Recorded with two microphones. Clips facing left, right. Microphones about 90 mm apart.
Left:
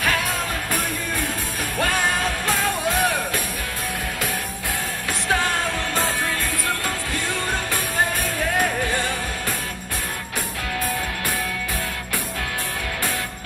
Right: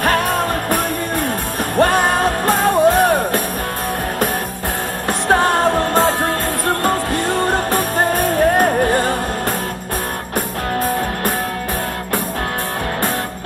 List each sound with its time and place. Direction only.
0.0 s music: 50° right (ahead or behind)
5.3 s music: 45° right (ahead or behind)